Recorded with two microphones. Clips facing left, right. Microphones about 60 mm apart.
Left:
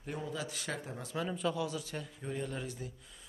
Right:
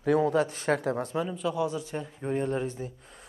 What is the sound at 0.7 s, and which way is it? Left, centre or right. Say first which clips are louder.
Speech: right 13 dB; right.